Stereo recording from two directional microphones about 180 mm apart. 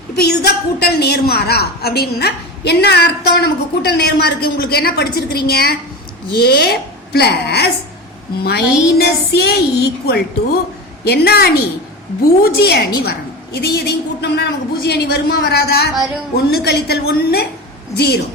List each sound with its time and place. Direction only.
0.2 s a woman's voice: 60° left (ahead or behind)